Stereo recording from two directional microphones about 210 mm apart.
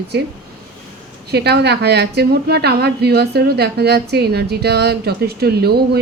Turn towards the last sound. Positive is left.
turn(degrees=-50)  # may be behind; listen again after turning